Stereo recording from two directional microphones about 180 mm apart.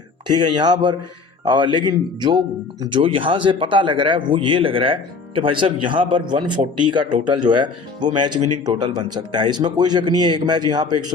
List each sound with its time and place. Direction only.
0.3 s speech: 25° right (ahead or behind)